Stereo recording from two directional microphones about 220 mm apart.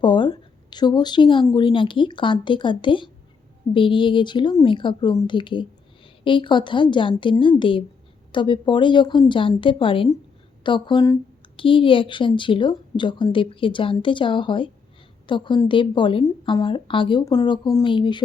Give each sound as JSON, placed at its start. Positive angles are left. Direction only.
{"t": 0.0, "sound": "speech", "side_deg": 20}